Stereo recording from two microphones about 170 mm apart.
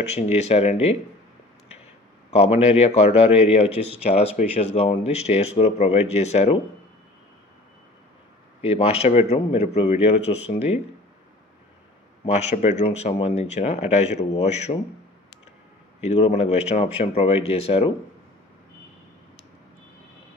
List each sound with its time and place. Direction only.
0.1 s speech: 40° left (ahead or behind)
2.3 s speech: 35° left (ahead or behind)
8.5 s speech: 35° left (ahead or behind)
12.3 s speech: 45° left (ahead or behind)
16.1 s speech: 40° left (ahead or behind)